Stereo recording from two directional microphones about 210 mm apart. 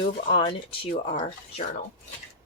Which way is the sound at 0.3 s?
20° left (ahead or behind).